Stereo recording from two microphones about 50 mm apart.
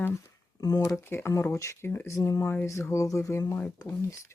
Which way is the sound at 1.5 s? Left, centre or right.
Left.